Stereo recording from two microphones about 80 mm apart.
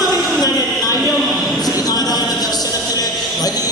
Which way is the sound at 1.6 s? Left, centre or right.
Left.